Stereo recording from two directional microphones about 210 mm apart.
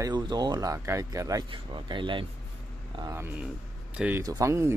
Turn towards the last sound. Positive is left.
turn(degrees=-15)  # may be behind; listen again after turning